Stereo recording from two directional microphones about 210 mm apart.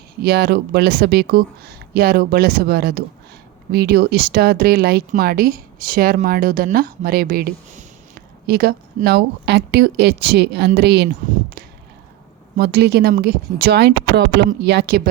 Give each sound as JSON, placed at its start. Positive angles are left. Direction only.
{"t": 0.2, "sound": "speech", "side_deg": -50}
{"t": 12.5, "sound": "speech", "side_deg": -50}